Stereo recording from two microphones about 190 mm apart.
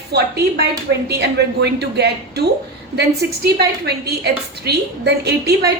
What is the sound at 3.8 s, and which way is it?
A woman's voice, 60° right (ahead or behind).